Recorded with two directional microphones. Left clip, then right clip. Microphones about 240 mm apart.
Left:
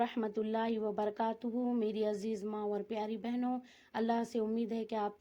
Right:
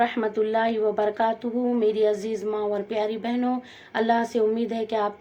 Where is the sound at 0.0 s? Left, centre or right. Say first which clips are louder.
Right 12 dB; left.